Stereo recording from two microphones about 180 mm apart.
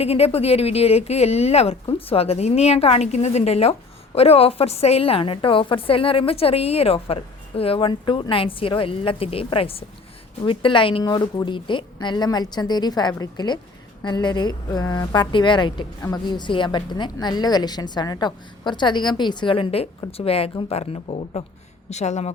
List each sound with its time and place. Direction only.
0.0 s a woman's voice: 35° left (ahead or behind)